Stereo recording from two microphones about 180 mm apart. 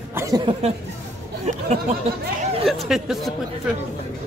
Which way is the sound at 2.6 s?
Centre (ahead or behind).